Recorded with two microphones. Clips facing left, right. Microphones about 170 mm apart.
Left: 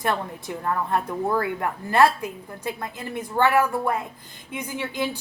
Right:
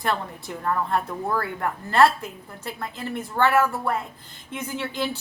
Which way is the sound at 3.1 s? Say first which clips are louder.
Left 1 dB; 15° left (ahead or behind).